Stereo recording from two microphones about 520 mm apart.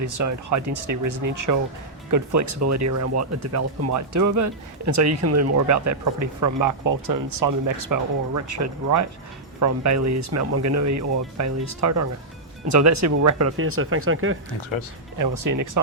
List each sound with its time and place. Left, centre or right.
0.0 s speech: right
15.2 s speech: right